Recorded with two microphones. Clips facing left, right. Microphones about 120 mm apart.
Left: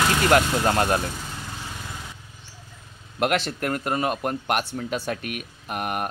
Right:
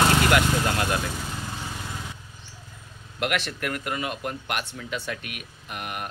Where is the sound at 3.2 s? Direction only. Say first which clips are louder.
Left 4 dB; 35° left (ahead or behind).